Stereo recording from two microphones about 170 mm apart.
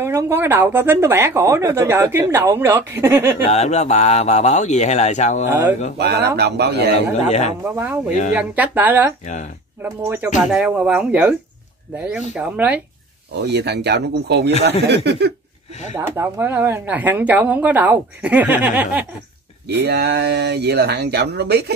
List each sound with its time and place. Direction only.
0.0 s speech: 15° right (ahead or behind)
3.4 s speech: 40° left (ahead or behind)
5.9 s speech: 75° right (ahead or behind)
7.2 s speech: 40° left (ahead or behind)
7.7 s speech: 15° right (ahead or behind)
9.2 s speech: 45° left (ahead or behind)
9.8 s speech: 15° right (ahead or behind)
13.3 s speech: 80° right
16.0 s speech: 15° right (ahead or behind)
19.8 s speech: 80° right